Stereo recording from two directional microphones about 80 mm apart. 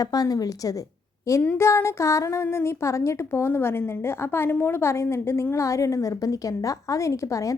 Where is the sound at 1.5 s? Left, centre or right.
Left.